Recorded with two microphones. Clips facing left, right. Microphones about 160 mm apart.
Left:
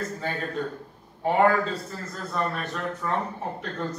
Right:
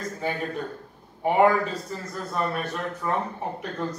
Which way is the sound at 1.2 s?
15° right (ahead or behind).